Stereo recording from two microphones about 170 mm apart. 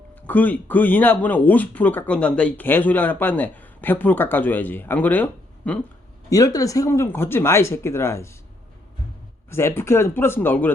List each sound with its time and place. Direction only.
0.2 s speech: 10° left (ahead or behind)
6.3 s speech: 20° left (ahead or behind)
9.5 s speech: 15° left (ahead or behind)